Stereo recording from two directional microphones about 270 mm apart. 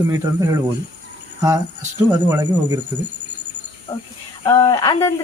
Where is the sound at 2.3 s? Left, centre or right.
Centre.